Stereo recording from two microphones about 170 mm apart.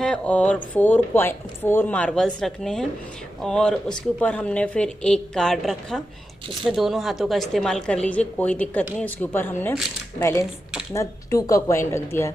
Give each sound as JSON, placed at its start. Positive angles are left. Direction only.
{"t": 0.0, "sound": "a woman's voice", "side_deg": 5}
{"t": 10.4, "sound": "mechanisms", "side_deg": -5}
{"t": 10.9, "sound": "speech", "side_deg": 20}